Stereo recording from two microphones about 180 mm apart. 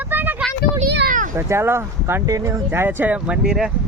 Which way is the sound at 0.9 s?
65° right (ahead or behind).